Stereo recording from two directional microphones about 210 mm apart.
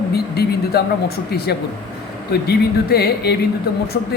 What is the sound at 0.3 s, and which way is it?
Speech, 50° left (ahead or behind).